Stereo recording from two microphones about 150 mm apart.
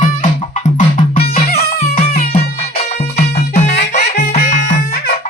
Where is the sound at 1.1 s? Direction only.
90° left.